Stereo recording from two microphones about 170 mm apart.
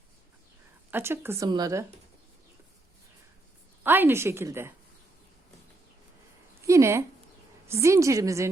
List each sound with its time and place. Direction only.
0.9 s speech: 15° right (ahead or behind)
3.8 s speech: 10° right (ahead or behind)
6.7 s speech: 15° right (ahead or behind)